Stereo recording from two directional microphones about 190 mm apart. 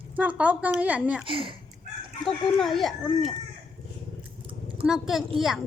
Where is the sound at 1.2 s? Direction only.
25° right (ahead or behind).